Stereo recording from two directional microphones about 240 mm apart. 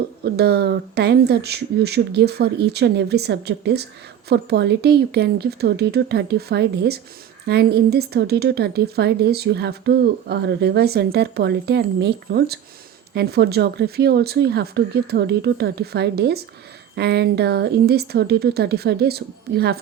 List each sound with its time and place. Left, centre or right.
0.3 s speech: right